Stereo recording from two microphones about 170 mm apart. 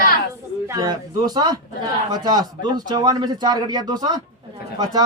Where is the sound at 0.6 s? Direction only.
20° right (ahead or behind).